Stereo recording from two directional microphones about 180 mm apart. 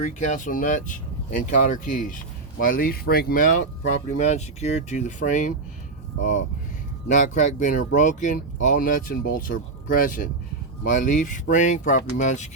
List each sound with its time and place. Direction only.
0.0 s speech: 45° left (ahead or behind)
7.1 s speech: 45° left (ahead or behind)